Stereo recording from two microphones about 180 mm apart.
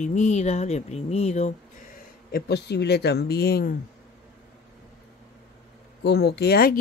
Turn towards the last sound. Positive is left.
turn(degrees=60)  # may be behind; listen again after turning